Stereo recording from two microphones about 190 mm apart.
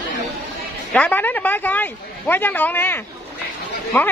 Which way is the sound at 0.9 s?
10° left (ahead or behind).